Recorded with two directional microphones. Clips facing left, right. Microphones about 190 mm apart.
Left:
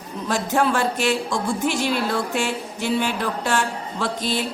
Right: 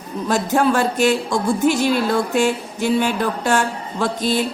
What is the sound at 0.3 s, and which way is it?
A woman's voice, 45° right (ahead or behind).